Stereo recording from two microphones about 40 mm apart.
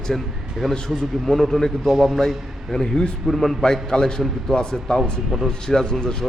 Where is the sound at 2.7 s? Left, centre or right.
Centre.